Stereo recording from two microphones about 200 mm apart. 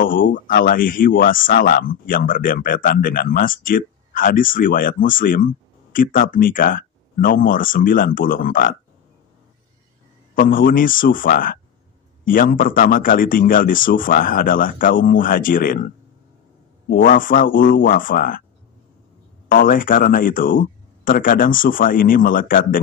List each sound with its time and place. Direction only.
0.0 s speech: 45° left (ahead or behind)
10.5 s speech: 45° left (ahead or behind)
16.9 s speech: 45° left (ahead or behind)
19.5 s speech: 45° left (ahead or behind)